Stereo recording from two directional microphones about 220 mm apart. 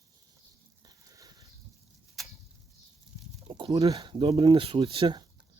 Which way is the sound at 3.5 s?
20° right (ahead or behind).